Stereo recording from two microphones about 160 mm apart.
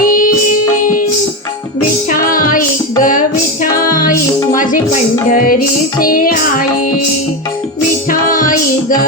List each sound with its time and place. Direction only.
0.0 s music: 60° left (ahead or behind)
2.3 s music: 60° left (ahead or behind)
8.3 s music: 55° left (ahead or behind)